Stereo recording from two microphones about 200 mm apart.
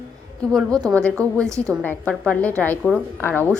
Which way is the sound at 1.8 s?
10° left (ahead or behind).